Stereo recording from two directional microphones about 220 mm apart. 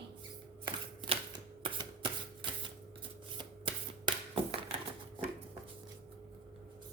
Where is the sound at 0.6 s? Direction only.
25° right (ahead or behind).